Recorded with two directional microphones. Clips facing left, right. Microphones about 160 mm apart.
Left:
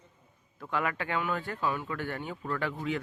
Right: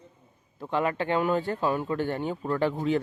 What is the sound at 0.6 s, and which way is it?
Speech, 30° right (ahead or behind).